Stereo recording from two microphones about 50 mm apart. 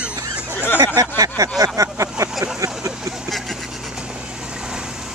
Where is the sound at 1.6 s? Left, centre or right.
Right.